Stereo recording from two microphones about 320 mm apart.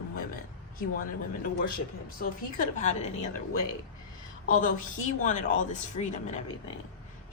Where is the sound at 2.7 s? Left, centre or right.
Left.